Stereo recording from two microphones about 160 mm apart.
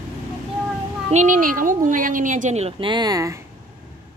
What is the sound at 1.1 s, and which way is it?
A child's voice, 50° right (ahead or behind).